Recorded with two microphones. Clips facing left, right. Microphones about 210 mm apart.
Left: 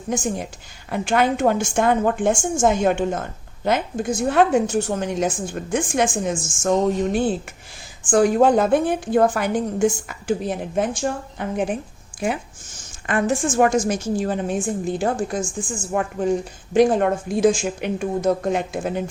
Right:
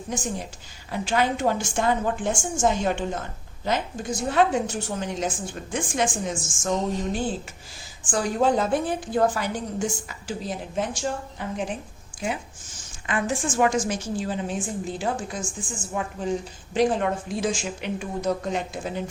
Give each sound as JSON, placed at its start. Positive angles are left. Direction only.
{"t": 0.9, "sound": "a woman's voice", "side_deg": 55}
{"t": 13.1, "sound": "a woman's voice", "side_deg": 50}